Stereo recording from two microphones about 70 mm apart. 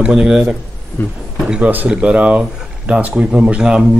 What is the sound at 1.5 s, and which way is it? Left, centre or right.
Speech, right.